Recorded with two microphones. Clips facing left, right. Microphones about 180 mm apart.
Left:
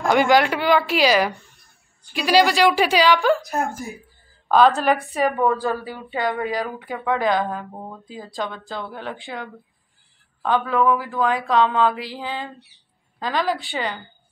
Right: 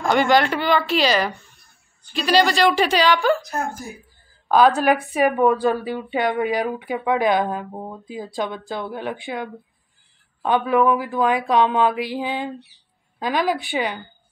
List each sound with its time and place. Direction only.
0.0 s a woman's voice: 5° left (ahead or behind)
4.5 s a woman's voice: 5° right (ahead or behind)
5.0 s speech: 15° right (ahead or behind)